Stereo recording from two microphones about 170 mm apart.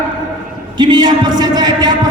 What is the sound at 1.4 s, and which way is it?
Music, 25° right (ahead or behind).